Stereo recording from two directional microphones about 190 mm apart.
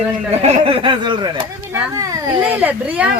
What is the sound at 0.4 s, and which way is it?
Speech, 30° right (ahead or behind).